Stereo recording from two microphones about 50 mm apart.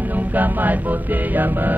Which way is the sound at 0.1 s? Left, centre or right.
Right.